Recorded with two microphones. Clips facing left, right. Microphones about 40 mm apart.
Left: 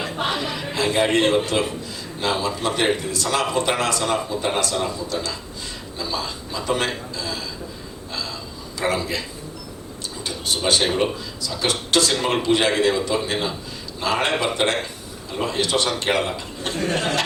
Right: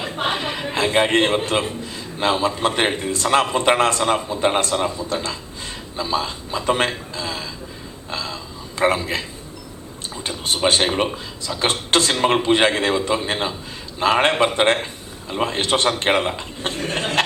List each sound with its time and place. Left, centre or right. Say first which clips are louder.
0.0 s a man's voice: right 1 dB; right
10.2 s a man's voice: right 3 dB; right